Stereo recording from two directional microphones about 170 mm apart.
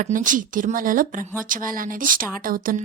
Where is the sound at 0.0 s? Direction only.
50° right (ahead or behind).